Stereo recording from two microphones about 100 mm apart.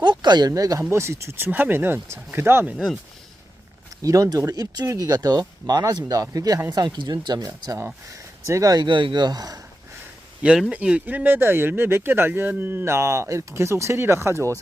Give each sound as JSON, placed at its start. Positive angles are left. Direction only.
{"t": 0.0, "sound": "speech", "side_deg": -45}
{"t": 2.7, "sound": "speech", "side_deg": 0}
{"t": 4.0, "sound": "speech", "side_deg": -35}
{"t": 10.4, "sound": "speech", "side_deg": -10}